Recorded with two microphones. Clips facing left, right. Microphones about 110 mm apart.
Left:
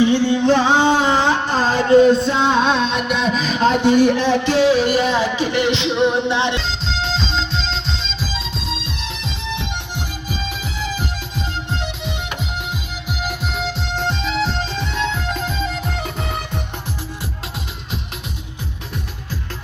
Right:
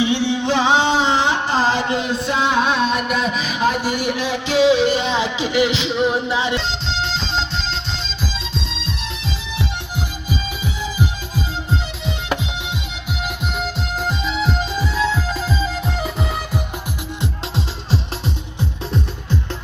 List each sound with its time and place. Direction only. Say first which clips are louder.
0.0 s music: left 4 dB; 15° right (ahead or behind)
0.3 s a sound: even; 10° right (ahead or behind)
13.2 s music: left 1 dB; centre (ahead or behind)